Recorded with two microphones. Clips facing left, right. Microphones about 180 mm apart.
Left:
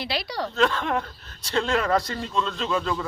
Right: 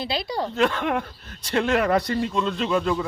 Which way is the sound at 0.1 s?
25° right (ahead or behind).